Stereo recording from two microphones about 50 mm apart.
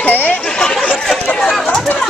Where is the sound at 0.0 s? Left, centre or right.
Left.